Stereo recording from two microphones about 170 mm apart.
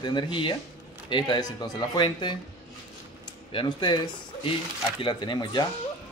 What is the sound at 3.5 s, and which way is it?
Speech, 30° left (ahead or behind).